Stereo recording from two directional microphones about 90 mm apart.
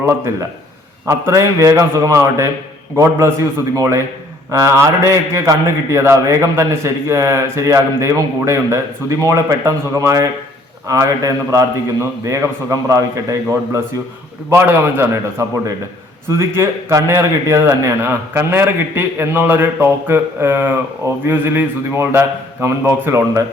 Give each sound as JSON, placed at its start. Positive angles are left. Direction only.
{"t": 1.0, "sound": "a man's voice", "side_deg": -35}